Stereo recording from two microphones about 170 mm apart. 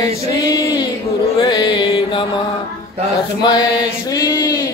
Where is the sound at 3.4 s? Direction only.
25° left (ahead or behind).